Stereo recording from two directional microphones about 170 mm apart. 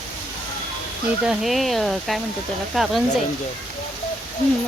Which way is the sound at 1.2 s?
5° right (ahead or behind).